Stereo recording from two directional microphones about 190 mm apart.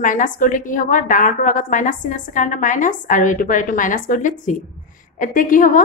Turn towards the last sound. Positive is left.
turn(degrees=45)  # may be behind; listen again after turning